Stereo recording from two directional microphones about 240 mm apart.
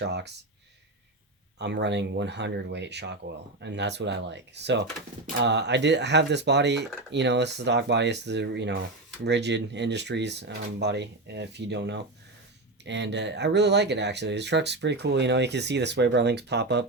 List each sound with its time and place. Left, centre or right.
0.0 s speech: right
1.5 s speech: right